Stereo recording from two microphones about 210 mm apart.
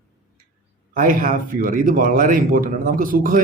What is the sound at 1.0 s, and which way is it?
A man's voice, 40° right (ahead or behind).